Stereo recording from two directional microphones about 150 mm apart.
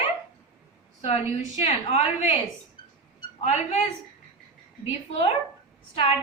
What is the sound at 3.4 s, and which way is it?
Speech, 45° left (ahead or behind).